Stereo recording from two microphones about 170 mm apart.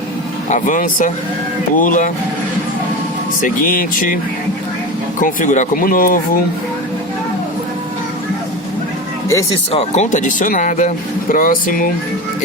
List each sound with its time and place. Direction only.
0.5 s speech: 50° left (ahead or behind)
3.4 s speech: 55° left (ahead or behind)
5.2 s speech: 50° left (ahead or behind)
9.7 s speech: 45° left (ahead or behind)